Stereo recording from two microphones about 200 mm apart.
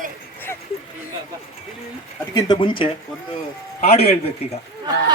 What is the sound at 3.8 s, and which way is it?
Speech, 30° left (ahead or behind).